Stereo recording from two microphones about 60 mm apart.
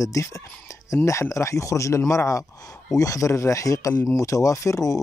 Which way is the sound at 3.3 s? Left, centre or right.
Left.